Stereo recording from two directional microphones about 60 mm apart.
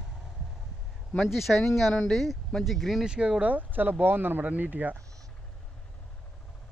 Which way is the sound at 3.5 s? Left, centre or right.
Right.